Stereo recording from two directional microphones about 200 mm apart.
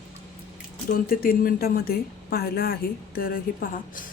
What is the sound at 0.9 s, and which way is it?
A woman's voice, 45° left (ahead or behind).